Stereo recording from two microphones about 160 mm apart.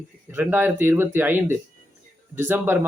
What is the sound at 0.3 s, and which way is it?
Speech, 10° right (ahead or behind).